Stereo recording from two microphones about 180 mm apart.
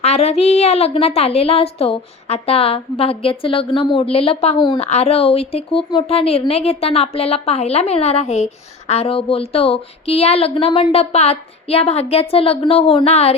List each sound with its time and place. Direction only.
0.0 s a woman's voice: 35° left (ahead or behind)